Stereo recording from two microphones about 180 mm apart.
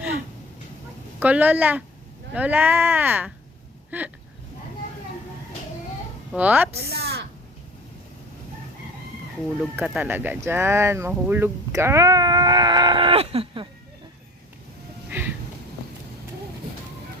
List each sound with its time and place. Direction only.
1.2 s speech: 10° right (ahead or behind)
6.3 s speech: 10° right (ahead or behind)
6.9 s speech: 60° right (ahead or behind)
9.6 s speech: 5° right (ahead or behind); by 13.7 s 30° right (ahead or behind)
15.1 s a sound: 10° right (ahead or behind)